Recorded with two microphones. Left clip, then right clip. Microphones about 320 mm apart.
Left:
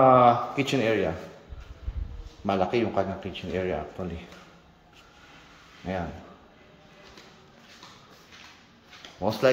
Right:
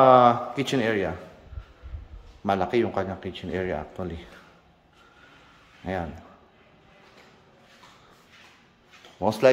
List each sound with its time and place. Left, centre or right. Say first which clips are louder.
0.0 s a sound: right 2 dB; centre
2.4 s speech: right 1 dB; centre
9.2 s speech: right 3 dB; centre